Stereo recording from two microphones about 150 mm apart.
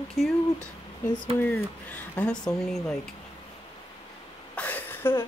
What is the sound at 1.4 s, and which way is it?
Speech, 10° left (ahead or behind).